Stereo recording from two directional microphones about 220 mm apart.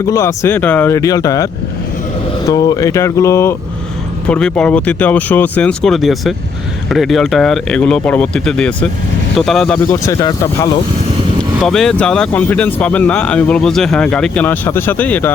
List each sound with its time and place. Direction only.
0.1 s speech: 15° left (ahead or behind)
2.5 s speech: 15° left (ahead or behind)
11.6 s speech: centre (ahead or behind)